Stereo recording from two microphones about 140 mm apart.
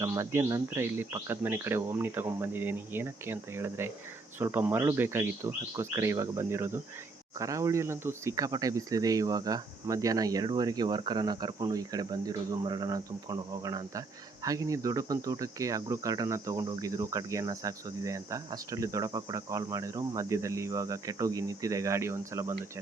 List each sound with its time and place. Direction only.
0.0 s speech: 20° right (ahead or behind)